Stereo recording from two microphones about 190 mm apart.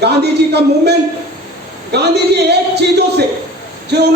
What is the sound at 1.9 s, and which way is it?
A man's voice, 60° right (ahead or behind).